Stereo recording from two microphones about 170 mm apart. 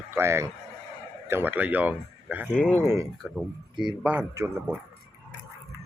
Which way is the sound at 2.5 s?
5° left (ahead or behind).